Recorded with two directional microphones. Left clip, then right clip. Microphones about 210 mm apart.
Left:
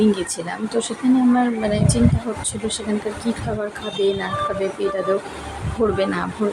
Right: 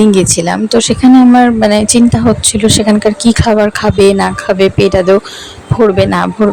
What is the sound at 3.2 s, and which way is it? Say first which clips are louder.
Speech: right 16 dB; 45° right (ahead or behind).